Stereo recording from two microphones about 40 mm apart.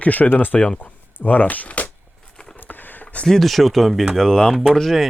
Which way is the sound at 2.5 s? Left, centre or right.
Left.